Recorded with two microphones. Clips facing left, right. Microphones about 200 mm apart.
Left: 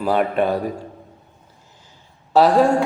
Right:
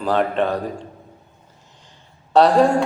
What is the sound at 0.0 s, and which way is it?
Speech, 10° left (ahead or behind).